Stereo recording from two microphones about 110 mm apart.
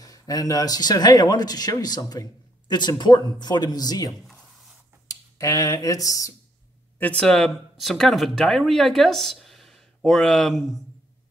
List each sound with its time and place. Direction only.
0.0 s speech: 35° left (ahead or behind)
7.0 s speech: 10° left (ahead or behind)